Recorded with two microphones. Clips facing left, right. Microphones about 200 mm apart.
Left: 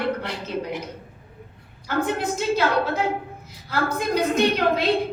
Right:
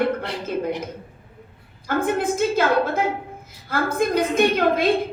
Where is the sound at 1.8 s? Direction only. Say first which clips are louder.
Right 3 dB; 50° right (ahead or behind).